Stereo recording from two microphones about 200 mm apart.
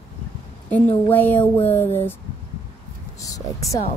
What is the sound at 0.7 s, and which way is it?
A woman's voice, 10° left (ahead or behind).